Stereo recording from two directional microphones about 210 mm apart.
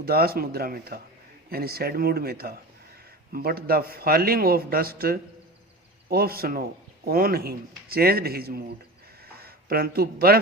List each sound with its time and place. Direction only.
0.0 s a man's voice: 45° right (ahead or behind)